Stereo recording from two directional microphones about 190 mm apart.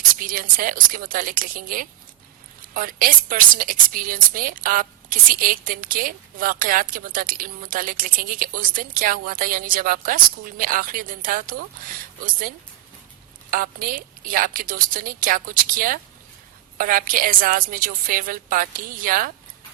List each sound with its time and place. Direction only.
0.2 s a woman's voice: 45° right (ahead or behind)